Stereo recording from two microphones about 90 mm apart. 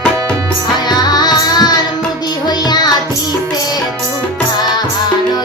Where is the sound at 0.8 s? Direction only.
45° left (ahead or behind).